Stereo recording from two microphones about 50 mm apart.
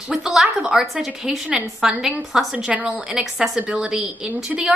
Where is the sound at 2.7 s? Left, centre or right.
Right.